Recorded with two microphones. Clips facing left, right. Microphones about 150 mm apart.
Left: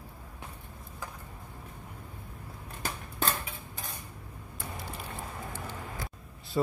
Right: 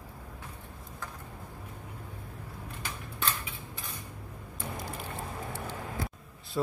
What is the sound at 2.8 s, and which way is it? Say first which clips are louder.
Typewriter: left 4 dB; 40° left (ahead or behind).